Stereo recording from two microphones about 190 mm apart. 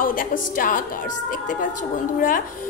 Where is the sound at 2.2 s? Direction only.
45° left (ahead or behind).